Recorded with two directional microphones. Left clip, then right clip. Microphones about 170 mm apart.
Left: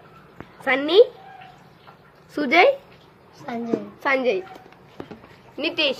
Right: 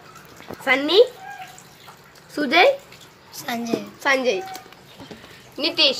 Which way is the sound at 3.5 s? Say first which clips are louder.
Right 3 dB; 40° left (ahead or behind).